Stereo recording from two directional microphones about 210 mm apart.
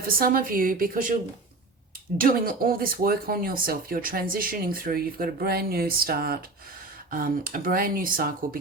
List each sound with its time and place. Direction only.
0.1 s speech: 45° right (ahead or behind)
2.1 s speech: 40° right (ahead or behind)